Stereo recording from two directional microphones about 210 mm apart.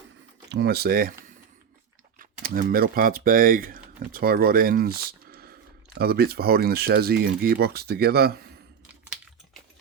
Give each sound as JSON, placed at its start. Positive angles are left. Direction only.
{"t": 0.5, "sound": "speech", "side_deg": -50}
{"t": 2.1, "sound": "speech", "side_deg": -45}